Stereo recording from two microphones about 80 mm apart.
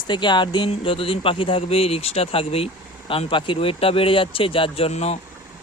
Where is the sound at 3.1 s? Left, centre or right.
Left.